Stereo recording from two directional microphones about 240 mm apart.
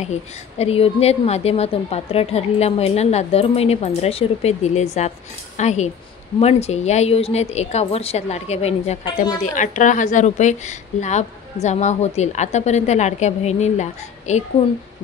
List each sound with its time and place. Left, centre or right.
0.6 s a woman's voice: left
9.4 s a woman's voice: left